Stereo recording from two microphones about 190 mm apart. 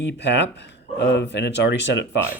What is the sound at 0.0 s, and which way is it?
Speech, 65° left (ahead or behind).